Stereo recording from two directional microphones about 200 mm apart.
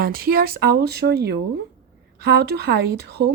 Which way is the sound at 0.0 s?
45° right (ahead or behind).